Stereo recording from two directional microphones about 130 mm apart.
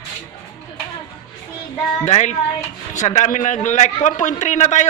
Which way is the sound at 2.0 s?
55° left (ahead or behind).